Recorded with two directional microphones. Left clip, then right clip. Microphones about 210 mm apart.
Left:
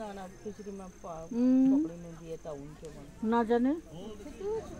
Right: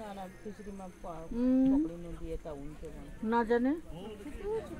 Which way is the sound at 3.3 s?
45° left (ahead or behind).